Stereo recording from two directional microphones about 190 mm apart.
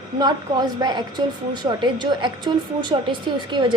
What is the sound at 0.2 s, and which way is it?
A woman's voice, 20° right (ahead or behind).